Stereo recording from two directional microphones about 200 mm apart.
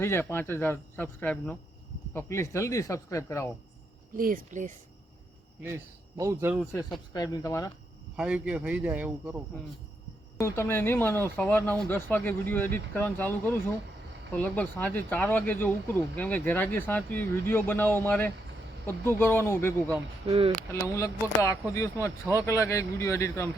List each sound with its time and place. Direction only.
0.0 s speech: 10° left (ahead or behind)
4.2 s speech: 40° right (ahead or behind)
5.6 s speech: 15° right (ahead or behind)
7.1 s speech: 20° left (ahead or behind)
8.1 s speech: 5° right (ahead or behind)
10.3 s speech: 15° left (ahead or behind)
20.2 s speech: 30° right (ahead or behind)
20.8 s speech: 15° left (ahead or behind)